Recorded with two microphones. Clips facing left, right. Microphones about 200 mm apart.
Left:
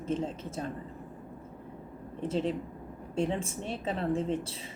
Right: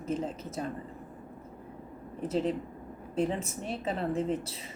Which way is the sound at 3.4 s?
30° left (ahead or behind).